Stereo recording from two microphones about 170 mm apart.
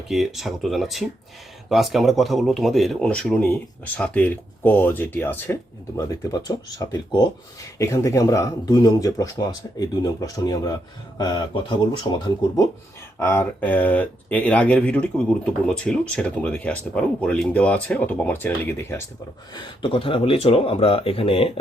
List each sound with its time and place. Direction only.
0.1 s a man's voice: centre (ahead or behind); by 12.1 s 25° left (ahead or behind)
13.1 s speech: 15° left (ahead or behind)
19.5 s speech: 30° left (ahead or behind)